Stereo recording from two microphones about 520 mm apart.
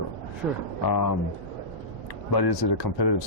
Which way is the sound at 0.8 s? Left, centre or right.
Left.